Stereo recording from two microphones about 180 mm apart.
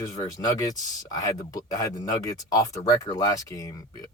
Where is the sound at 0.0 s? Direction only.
20° left (ahead or behind).